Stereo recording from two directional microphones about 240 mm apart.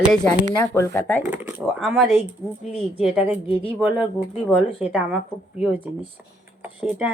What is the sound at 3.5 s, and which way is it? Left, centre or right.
Speech, left.